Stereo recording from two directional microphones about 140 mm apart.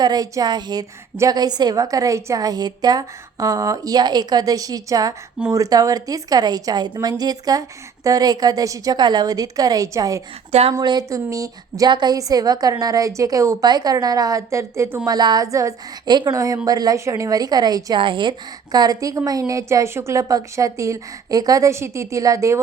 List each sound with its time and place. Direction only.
0.0 s a woman's voice: 25° right (ahead or behind)
10.5 s speech: 45° right (ahead or behind)
10.8 s a woman's voice: 30° right (ahead or behind)